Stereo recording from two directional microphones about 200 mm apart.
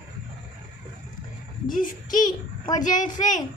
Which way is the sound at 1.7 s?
40° left (ahead or behind).